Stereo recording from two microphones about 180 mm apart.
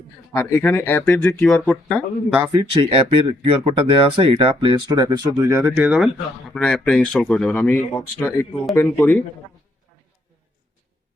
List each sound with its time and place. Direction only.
0.3 s speech: 15° left (ahead or behind)
2.4 s speech: 20° right (ahead or behind); by 6.1 s 5° right (ahead or behind)
6.5 s speech: 5° left (ahead or behind)
8.7 s speech: centre (ahead or behind)